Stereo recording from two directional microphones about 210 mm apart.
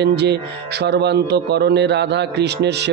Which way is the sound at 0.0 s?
55° right (ahead or behind).